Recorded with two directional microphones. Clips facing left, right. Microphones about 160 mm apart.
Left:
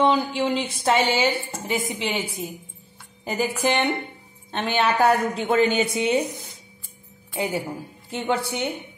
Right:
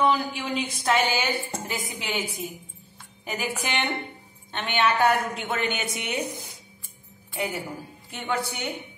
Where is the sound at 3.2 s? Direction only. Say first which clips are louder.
Left 7 dB; 35° left (ahead or behind).